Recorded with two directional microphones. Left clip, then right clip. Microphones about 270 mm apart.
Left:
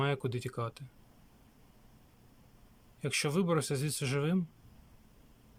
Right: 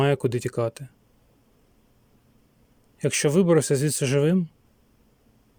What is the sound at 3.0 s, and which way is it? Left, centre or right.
Speech, right.